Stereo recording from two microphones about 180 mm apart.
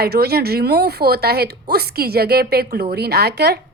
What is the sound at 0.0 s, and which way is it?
A woman's voice, 60° right (ahead or behind).